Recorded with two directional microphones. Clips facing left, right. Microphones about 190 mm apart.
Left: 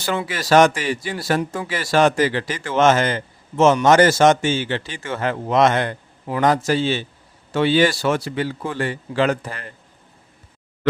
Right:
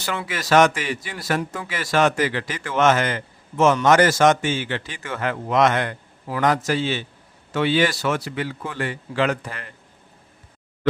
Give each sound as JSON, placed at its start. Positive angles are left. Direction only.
{"t": 0.0, "sound": "a man's voice", "side_deg": 30}